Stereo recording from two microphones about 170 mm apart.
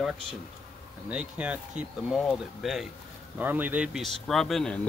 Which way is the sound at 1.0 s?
10° right (ahead or behind).